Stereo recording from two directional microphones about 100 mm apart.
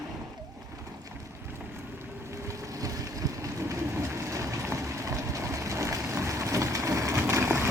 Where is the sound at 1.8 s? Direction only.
25° right (ahead or behind).